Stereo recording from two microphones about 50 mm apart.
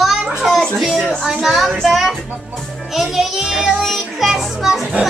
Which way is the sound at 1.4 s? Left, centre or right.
Centre.